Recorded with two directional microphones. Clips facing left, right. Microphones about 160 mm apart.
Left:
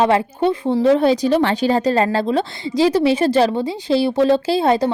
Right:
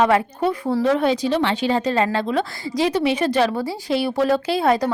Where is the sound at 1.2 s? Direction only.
45° left (ahead or behind).